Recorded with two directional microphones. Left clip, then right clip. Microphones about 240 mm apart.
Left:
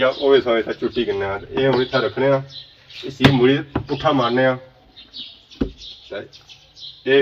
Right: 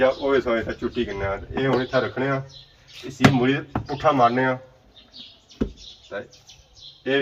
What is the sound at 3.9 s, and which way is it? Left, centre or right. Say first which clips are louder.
Speech: even; centre.